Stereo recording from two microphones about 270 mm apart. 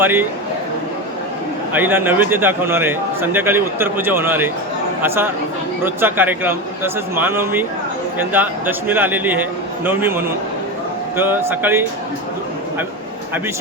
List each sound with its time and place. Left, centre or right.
0.0 s a man's voice: centre
1.7 s a man's voice: centre